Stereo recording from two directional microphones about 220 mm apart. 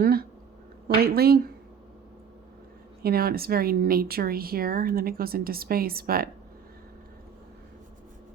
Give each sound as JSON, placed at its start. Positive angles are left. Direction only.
{"t": 0.0, "sound": "a sound", "side_deg": -45}
{"t": 0.9, "sound": "speech", "side_deg": -45}
{"t": 3.0, "sound": "speech", "side_deg": -45}